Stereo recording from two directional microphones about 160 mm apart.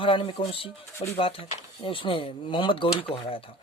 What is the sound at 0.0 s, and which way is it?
Speech, 35° left (ahead or behind).